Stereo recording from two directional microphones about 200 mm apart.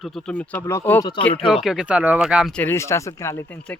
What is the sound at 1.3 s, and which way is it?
Speech, 30° left (ahead or behind).